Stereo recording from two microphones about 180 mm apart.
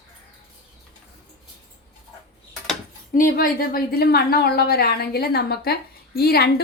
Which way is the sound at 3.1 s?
50° left (ahead or behind).